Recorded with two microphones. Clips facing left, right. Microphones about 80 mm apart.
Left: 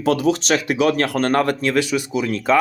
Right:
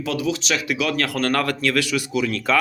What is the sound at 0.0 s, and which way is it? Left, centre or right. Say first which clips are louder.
Speech: left 6 dB; left.